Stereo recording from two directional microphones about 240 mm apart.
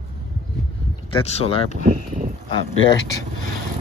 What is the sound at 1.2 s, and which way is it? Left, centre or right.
Speech, left.